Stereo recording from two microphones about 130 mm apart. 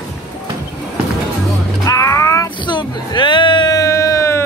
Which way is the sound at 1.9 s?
25° left (ahead or behind).